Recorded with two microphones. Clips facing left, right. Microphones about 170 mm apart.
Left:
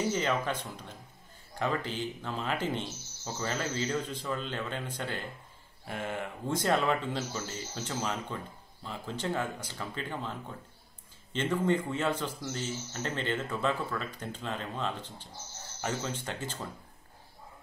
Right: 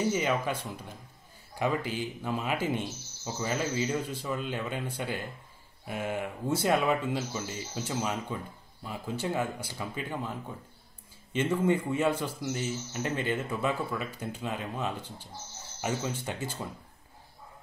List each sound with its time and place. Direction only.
0.1 s a man's voice: 10° right (ahead or behind)
11.3 s a man's voice: 10° right (ahead or behind)